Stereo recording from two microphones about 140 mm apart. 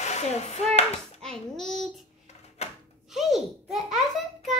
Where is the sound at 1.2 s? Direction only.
5° left (ahead or behind).